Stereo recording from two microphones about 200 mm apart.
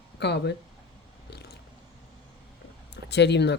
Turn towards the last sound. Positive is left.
turn(degrees=60)  # may be behind; listen again after turning